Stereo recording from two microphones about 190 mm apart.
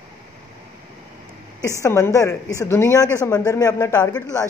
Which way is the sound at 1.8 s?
15° left (ahead or behind).